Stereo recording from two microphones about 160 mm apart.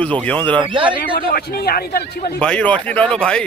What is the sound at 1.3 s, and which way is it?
A man's voice, 75° left (ahead or behind).